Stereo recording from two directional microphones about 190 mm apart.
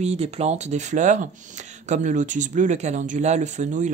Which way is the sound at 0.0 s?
35° right (ahead or behind).